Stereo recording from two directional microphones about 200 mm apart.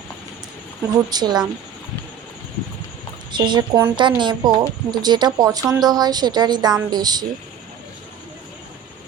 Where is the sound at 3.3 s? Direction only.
20° right (ahead or behind).